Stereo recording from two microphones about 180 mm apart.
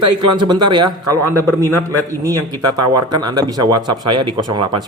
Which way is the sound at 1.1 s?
15° left (ahead or behind).